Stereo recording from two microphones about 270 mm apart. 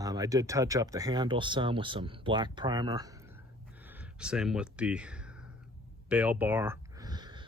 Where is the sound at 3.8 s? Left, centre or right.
Centre.